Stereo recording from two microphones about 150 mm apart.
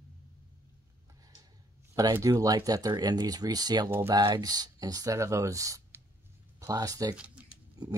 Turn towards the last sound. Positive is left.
turn(degrees=-25)  # may be behind; listen again after turning